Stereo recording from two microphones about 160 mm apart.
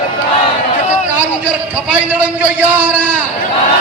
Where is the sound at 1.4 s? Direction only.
10° right (ahead or behind).